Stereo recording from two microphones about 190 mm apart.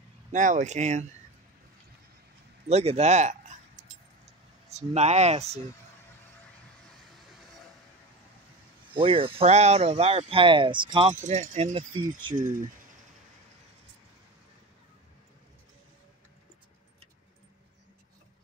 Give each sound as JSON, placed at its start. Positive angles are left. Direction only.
{"t": 0.3, "sound": "speech", "side_deg": -40}
{"t": 2.7, "sound": "speech", "side_deg": -35}
{"t": 8.9, "sound": "speech", "side_deg": -30}